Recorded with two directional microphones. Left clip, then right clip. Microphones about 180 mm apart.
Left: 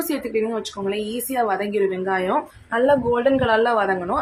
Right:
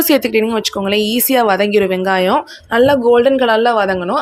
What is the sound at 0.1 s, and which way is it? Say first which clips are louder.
Speech: right 11 dB; 55° right (ahead or behind).